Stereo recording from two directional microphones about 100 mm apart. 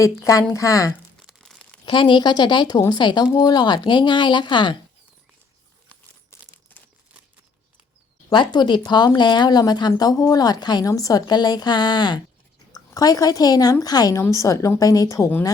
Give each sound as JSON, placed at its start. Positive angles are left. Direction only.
{"t": 0.0, "sound": "a woman's voice", "side_deg": 35}
{"t": 1.4, "sound": "crumpling", "side_deg": 5}
{"t": 1.8, "sound": "speech", "side_deg": 55}
{"t": 8.3, "sound": "a woman's voice", "side_deg": 50}